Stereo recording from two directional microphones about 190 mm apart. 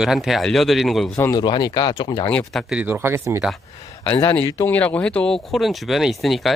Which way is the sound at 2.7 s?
10° right (ahead or behind).